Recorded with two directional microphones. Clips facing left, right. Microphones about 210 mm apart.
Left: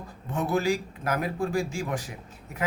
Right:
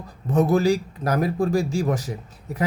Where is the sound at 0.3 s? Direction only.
40° right (ahead or behind).